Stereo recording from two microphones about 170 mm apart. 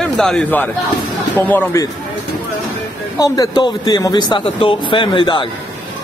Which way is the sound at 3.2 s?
25° left (ahead or behind).